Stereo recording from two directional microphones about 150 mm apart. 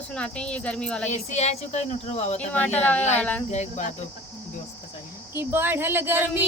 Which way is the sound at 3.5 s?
50° left (ahead or behind).